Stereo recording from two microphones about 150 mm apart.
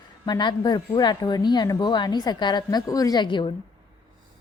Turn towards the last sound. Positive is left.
turn(degrees=30)  # may be behind; listen again after turning